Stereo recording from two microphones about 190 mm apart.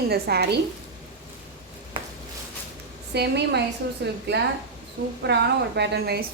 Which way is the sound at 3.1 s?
60° right (ahead or behind).